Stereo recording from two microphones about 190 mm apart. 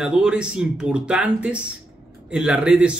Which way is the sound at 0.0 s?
5° right (ahead or behind).